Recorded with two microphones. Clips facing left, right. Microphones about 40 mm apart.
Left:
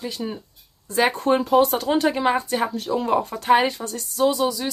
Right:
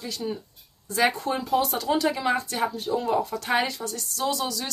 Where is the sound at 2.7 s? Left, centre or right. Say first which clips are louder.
Left 2 dB; left.